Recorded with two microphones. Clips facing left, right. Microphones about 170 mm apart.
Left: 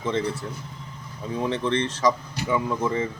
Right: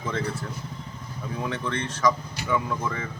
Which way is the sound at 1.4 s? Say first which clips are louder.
Left 6 dB; 25° left (ahead or behind).